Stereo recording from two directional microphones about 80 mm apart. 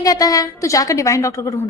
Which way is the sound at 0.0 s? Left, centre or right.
Left.